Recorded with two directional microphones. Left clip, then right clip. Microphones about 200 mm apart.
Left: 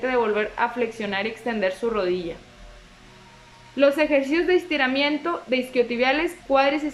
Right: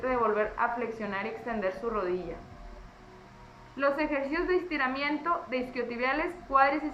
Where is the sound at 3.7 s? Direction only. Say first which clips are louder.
Left 10 dB; 50° left (ahead or behind).